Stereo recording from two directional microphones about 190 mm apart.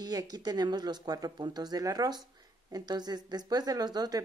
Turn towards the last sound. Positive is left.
turn(degrees=-20)  # may be behind; listen again after turning